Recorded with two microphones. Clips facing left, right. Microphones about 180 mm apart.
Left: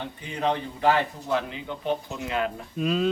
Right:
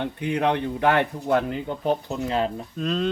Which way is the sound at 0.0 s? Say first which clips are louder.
Right 5 dB; 65° right (ahead or behind).